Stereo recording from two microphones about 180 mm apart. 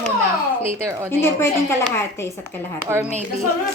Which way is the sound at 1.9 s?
15° left (ahead or behind).